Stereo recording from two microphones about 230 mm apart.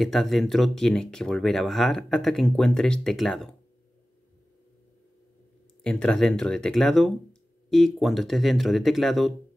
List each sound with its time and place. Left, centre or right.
0.0 s speech: centre
5.9 s speech: centre